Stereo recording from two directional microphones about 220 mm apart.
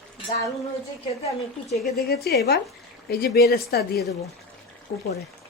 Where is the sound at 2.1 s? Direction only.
45° left (ahead or behind).